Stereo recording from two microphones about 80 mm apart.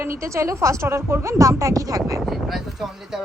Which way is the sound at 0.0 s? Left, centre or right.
Right.